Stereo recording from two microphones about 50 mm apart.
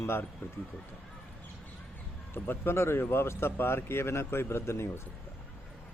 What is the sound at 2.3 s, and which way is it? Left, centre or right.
Speech, left.